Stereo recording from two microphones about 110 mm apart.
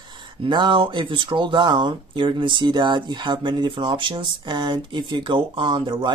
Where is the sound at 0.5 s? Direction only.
45° right (ahead or behind).